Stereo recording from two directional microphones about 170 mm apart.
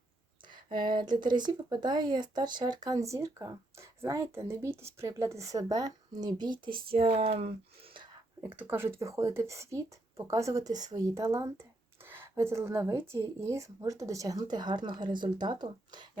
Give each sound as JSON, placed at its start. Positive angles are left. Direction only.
{"t": 0.4, "sound": "speech", "side_deg": -25}
{"t": 8.4, "sound": "speech", "side_deg": -10}